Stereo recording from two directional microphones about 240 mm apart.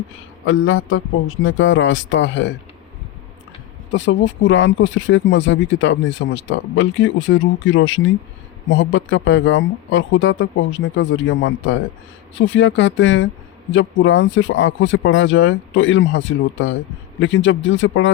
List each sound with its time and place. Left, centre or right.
0.4 s speech: left
3.9 s speech: left